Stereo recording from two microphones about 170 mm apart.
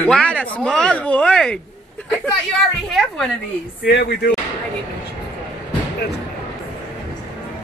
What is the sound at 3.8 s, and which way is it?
Speech, 80° left.